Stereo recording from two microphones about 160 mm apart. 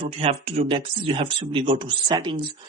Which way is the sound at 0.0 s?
40° right (ahead or behind).